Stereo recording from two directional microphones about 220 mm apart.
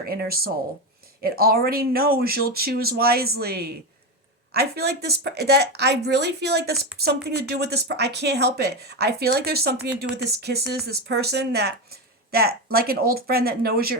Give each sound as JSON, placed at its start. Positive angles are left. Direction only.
{"t": 0.0, "sound": "speech", "side_deg": -45}